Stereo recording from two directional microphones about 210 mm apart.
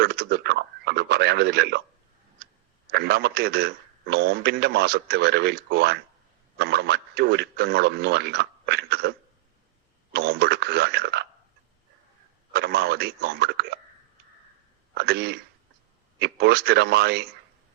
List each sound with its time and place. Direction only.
0.0 s radio: 50° right (ahead or behind)
2.9 s speech: 50° right (ahead or behind)
12.5 s speech: 50° right (ahead or behind)
14.9 s speech: 50° right (ahead or behind)